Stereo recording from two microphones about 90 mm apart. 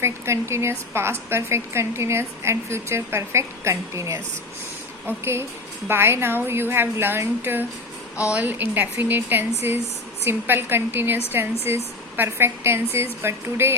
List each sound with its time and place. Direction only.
0.0 s speech: 30° right (ahead or behind)